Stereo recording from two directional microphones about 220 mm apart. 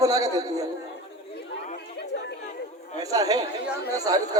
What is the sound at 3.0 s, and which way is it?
A man's voice, 15° right (ahead or behind).